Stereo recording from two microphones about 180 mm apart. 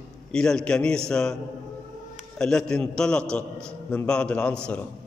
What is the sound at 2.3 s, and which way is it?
A man's voice, 5° left (ahead or behind).